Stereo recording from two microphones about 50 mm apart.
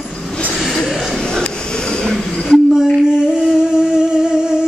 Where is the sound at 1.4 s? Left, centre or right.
Centre.